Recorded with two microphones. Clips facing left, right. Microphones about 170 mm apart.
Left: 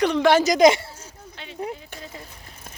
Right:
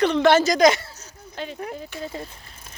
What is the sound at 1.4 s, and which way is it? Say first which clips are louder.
Speech: right 11 dB; 40° right (ahead or behind).